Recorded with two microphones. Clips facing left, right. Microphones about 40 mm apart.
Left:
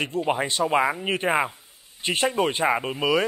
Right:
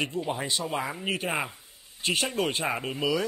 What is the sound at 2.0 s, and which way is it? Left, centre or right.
Speech, left.